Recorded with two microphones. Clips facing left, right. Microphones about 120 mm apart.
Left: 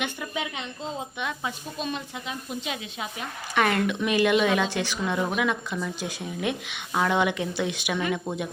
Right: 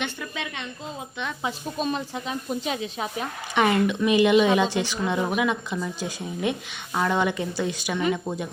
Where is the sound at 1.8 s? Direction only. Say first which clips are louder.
Right 5 dB; 35° right (ahead or behind).